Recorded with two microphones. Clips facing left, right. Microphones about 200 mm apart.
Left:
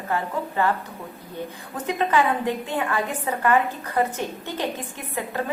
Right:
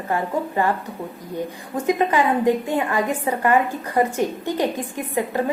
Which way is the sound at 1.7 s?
10° right (ahead or behind).